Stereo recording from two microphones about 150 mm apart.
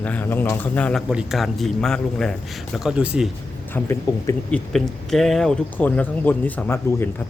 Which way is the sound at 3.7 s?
15° left (ahead or behind).